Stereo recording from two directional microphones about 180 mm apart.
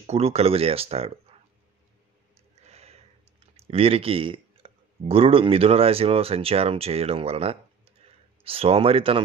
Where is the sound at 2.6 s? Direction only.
35° right (ahead or behind).